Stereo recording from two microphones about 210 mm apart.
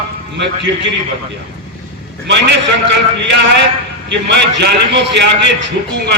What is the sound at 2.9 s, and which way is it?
A man's voice, 55° right (ahead or behind).